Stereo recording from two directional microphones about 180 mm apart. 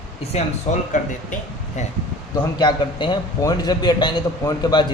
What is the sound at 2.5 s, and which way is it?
A man's voice, 25° left (ahead or behind).